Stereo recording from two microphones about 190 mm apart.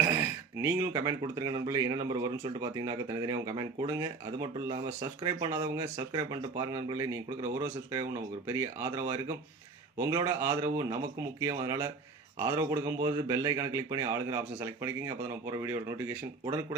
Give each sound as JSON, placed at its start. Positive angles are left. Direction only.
{"t": 0.6, "sound": "speech", "side_deg": -15}